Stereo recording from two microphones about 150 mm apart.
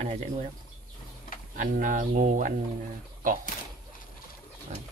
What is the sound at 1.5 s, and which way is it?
Speech, 60° right (ahead or behind).